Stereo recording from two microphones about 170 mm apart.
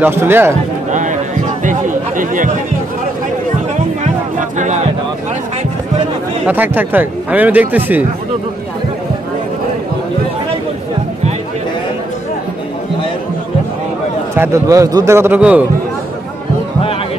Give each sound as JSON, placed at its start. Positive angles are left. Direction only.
{"t": 0.0, "sound": "speech", "side_deg": -15}
{"t": 0.9, "sound": "chatter", "side_deg": -50}
{"t": 4.0, "sound": "music", "side_deg": -45}
{"t": 6.4, "sound": "speech", "side_deg": -10}
{"t": 14.3, "sound": "speech", "side_deg": -15}